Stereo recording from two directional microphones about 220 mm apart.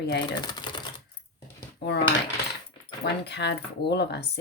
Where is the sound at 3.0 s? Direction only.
50° left (ahead or behind).